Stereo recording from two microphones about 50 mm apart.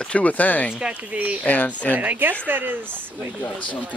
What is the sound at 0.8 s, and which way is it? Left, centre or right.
Speech, right.